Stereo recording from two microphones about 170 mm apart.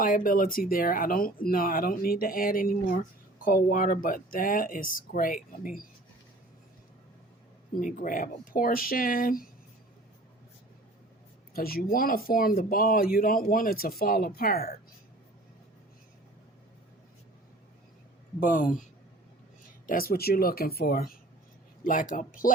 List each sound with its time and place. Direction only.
0.0 s speech: 55° left (ahead or behind)
7.8 s speech: 50° left (ahead or behind)
11.5 s speech: 60° left (ahead or behind)
18.3 s speech: 50° left (ahead or behind)
19.9 s speech: 60° left (ahead or behind)
22.1 s speech: 50° left (ahead or behind)